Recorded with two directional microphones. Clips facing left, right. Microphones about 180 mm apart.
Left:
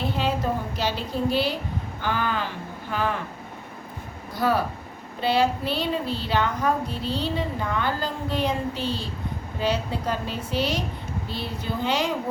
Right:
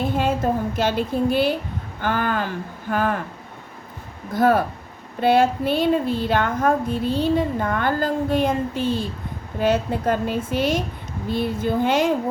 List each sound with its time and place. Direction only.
0.1 s a sound: 50° right (ahead or behind)
0.8 s speech: 50° right (ahead or behind)
4.4 s speech: 50° right (ahead or behind)